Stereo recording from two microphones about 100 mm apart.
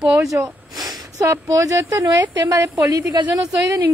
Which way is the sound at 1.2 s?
30° right (ahead or behind).